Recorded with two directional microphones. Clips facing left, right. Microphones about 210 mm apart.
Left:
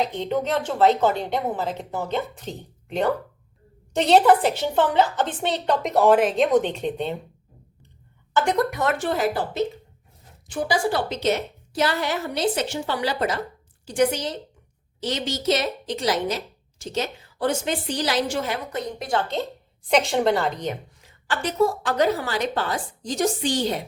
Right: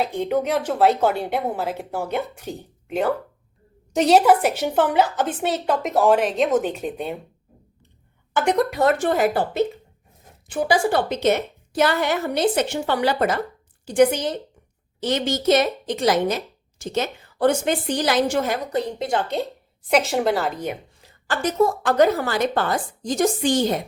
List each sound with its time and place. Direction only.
0.0 s a woman's voice: 10° right (ahead or behind)
8.4 s a woman's voice: 20° right (ahead or behind)
8.8 s speech: 35° right (ahead or behind)
9.0 s a woman's voice: 55° right (ahead or behind)
18.7 s a woman's voice: 30° right (ahead or behind); by 19.5 s 15° right (ahead or behind)
19.9 s a woman's voice: 5° right (ahead or behind)
21.2 s a woman's voice: 50° right (ahead or behind)